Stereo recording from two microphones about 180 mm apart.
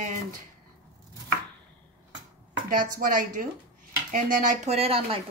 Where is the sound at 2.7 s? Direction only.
50° right (ahead or behind).